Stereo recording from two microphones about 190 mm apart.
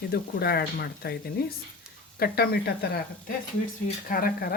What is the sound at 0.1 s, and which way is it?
Speech, 55° left (ahead or behind).